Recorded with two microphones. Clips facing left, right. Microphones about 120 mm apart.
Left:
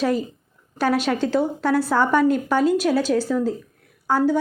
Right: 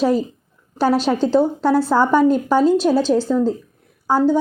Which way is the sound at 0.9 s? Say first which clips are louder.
Right 5 dB; 30° right (ahead or behind).